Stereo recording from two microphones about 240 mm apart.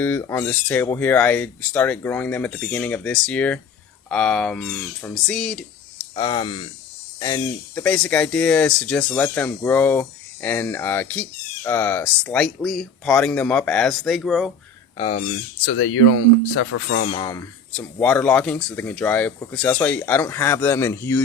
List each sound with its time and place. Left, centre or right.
0.0 s speech: centre
6.1 s speech: centre
14.9 s speech: left
15.6 s speech: left
17.0 s speech: left